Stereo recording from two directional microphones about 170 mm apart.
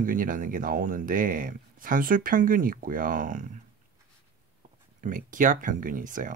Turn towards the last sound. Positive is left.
turn(degrees=-50)  # may be behind; listen again after turning